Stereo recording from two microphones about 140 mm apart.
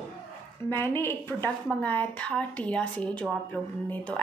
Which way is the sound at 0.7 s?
15° left (ahead or behind).